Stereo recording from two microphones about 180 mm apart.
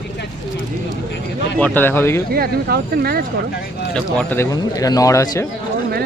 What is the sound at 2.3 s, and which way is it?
Speech, 60° right (ahead or behind).